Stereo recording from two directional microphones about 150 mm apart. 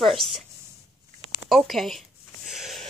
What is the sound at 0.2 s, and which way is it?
Speech, centre (ahead or behind).